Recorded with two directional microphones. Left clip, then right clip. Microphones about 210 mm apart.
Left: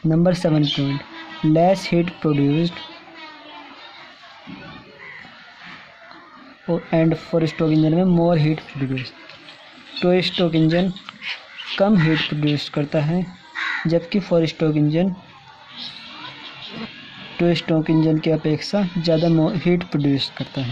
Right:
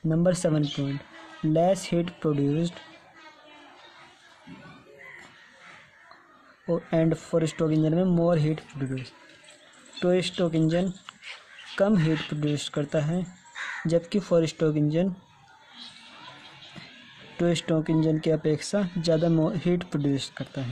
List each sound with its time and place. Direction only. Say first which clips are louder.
0.1 s speech: left 5 dB; 15° right (ahead or behind)
6.6 s speech: left 6 dB; 15° right (ahead or behind)
9.9 s speech: left 6 dB; 15° right (ahead or behind)
17.4 s speech: left 6 dB; 20° right (ahead or behind)